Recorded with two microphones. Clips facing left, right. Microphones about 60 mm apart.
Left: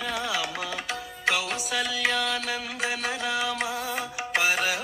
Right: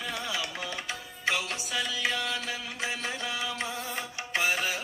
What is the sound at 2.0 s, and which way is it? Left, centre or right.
Mantra, left.